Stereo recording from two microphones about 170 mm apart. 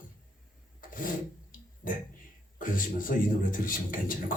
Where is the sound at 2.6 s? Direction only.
55° left (ahead or behind).